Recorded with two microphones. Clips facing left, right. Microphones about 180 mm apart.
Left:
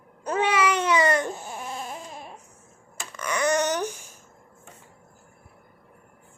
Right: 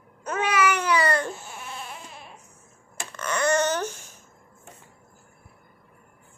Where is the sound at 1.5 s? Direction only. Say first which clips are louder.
Left 4 dB; 40° left (ahead or behind).